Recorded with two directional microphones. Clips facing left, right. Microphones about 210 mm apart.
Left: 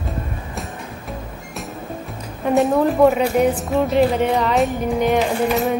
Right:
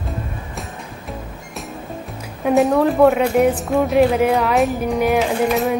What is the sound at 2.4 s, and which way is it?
Speech, centre (ahead or behind).